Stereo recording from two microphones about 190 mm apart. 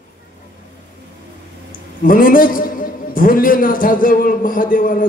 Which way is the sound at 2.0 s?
45° left (ahead or behind).